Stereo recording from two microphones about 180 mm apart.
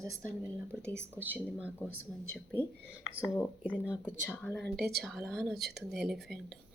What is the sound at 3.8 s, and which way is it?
Speech, 5° right (ahead or behind).